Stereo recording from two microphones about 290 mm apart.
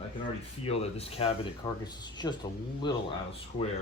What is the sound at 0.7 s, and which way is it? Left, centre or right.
Speech, left.